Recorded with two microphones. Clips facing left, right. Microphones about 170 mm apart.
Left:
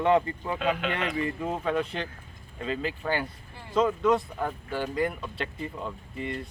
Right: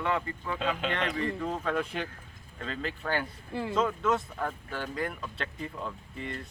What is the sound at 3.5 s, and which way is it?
Speech, 90° right.